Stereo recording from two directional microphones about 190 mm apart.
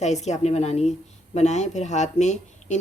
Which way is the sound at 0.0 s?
35° left (ahead or behind).